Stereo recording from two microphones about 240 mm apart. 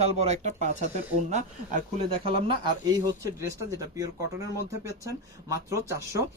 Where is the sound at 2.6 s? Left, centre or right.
Centre.